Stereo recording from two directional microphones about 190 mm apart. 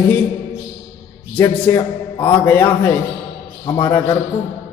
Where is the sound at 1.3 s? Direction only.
15° left (ahead or behind).